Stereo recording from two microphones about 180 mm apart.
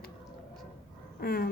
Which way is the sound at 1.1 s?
55° left (ahead or behind).